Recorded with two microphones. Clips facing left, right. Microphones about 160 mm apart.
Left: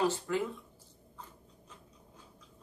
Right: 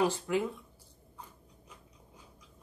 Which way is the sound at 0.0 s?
15° right (ahead or behind).